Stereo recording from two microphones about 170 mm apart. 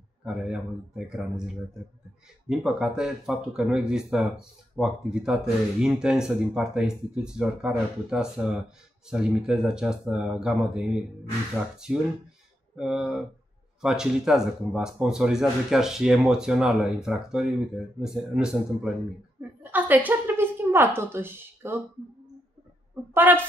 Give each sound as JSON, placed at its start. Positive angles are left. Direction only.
{"t": 0.2, "sound": "speech", "side_deg": -5}
{"t": 12.7, "sound": "speech", "side_deg": -5}
{"t": 19.6, "sound": "a woman's voice", "side_deg": -10}
{"t": 23.1, "sound": "speech", "side_deg": -10}